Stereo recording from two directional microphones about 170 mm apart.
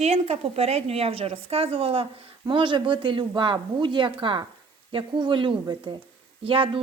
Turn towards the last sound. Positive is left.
turn(degrees=-30)  # may be behind; listen again after turning